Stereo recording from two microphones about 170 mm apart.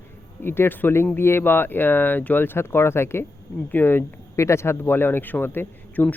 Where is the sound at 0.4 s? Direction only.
15° left (ahead or behind).